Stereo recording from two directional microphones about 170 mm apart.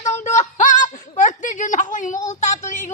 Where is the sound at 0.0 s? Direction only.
45° left (ahead or behind).